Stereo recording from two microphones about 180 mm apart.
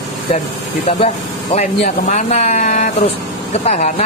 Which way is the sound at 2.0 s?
40° left (ahead or behind).